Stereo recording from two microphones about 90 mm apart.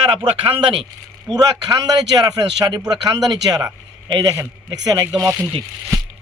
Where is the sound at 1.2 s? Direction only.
45° right (ahead or behind).